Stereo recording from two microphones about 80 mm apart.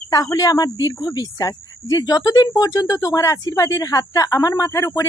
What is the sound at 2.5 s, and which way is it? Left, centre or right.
A woman's voice, left.